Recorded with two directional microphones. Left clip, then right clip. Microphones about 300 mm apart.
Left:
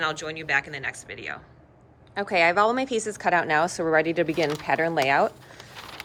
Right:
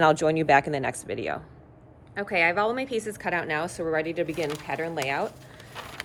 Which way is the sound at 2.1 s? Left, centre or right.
Centre.